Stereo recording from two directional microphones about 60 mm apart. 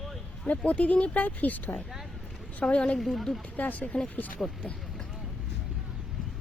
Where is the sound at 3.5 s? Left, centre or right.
Left.